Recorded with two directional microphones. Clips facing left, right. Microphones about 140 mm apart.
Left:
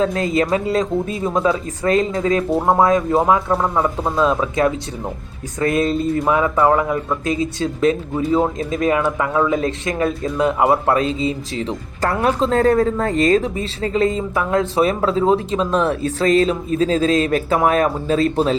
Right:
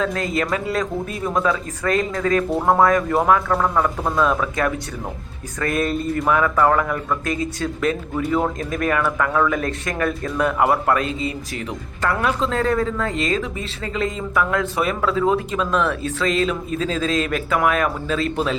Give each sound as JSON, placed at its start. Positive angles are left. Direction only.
{"t": 0.0, "sound": "speech", "side_deg": 25}